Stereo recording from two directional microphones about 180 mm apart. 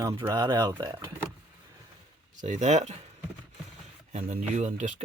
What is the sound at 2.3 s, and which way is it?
Speech, 40° right (ahead or behind).